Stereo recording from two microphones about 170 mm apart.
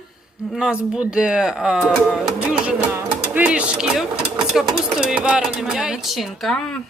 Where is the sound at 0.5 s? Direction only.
5° right (ahead or behind).